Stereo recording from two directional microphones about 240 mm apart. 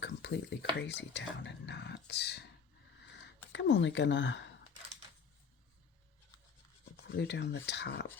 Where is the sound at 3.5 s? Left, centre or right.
Left.